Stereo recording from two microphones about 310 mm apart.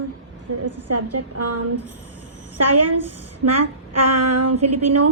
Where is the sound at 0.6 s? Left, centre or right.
Right.